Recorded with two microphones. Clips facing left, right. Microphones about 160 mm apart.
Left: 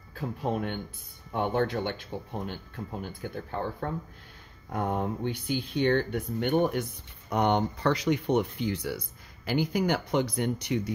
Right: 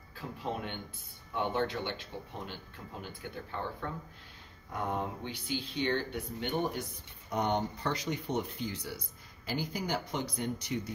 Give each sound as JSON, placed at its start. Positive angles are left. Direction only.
{"t": 0.1, "sound": "speech", "side_deg": 50}
{"t": 4.7, "sound": "speech", "side_deg": 50}